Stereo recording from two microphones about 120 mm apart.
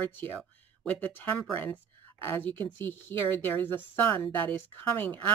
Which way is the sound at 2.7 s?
15° left (ahead or behind).